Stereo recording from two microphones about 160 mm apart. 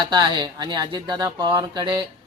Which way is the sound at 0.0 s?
30° right (ahead or behind).